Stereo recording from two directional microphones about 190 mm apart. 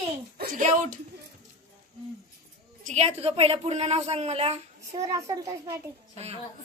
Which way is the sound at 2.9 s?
35° right (ahead or behind).